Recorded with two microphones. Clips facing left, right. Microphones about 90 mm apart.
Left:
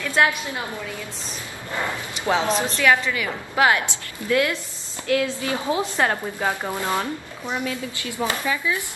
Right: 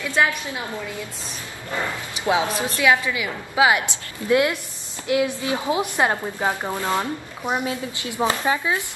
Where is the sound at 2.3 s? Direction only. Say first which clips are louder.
Even; 15° right (ahead or behind).